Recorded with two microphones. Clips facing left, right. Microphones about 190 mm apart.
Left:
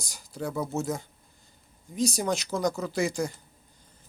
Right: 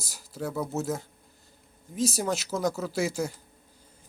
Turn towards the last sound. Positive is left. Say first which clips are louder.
# left 1 dB
turn(degrees=-5)  # may be behind; listen again after turning